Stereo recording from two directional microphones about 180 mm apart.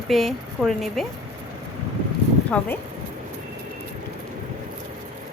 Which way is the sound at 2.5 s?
5° left (ahead or behind).